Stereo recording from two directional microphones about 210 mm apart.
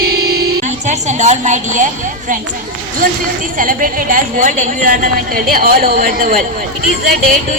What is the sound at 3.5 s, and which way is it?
A woman's voice, 40° right (ahead or behind).